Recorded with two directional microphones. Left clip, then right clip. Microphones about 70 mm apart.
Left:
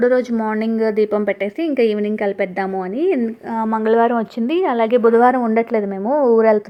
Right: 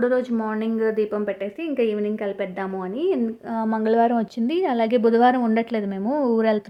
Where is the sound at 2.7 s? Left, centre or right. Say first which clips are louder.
Left 3 dB; left.